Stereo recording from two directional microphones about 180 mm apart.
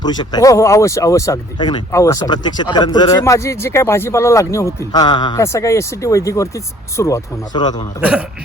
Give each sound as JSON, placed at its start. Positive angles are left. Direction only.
{"t": 0.0, "sound": "speech", "side_deg": 25}